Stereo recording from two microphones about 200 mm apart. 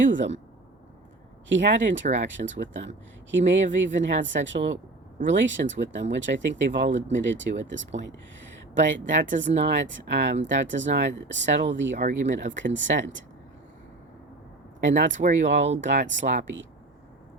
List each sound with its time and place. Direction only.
0.0 s speech: 65° right (ahead or behind)
1.5 s speech: 65° right (ahead or behind)
15.1 s speech: 35° right (ahead or behind)
15.8 s speech: 65° right (ahead or behind)